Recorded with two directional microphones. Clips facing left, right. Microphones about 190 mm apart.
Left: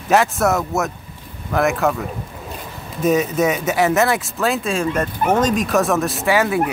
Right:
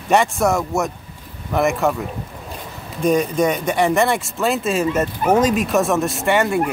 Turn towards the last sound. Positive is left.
turn(degrees=0)  # may be behind; listen again after turning